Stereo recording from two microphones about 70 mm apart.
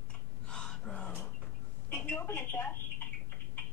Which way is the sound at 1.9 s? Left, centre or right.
Left.